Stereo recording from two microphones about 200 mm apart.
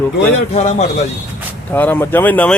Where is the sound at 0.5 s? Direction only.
35° left (ahead or behind).